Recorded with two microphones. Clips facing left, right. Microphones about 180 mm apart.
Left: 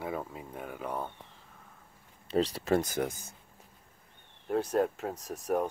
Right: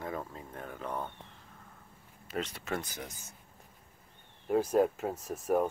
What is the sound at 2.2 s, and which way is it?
Speech, 35° left (ahead or behind).